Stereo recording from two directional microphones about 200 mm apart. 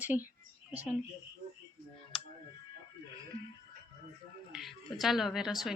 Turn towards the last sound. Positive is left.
turn(degrees=0)  # may be behind; listen again after turning